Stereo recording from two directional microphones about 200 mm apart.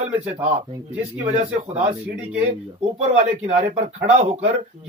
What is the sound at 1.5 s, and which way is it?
Speech, 10° right (ahead or behind).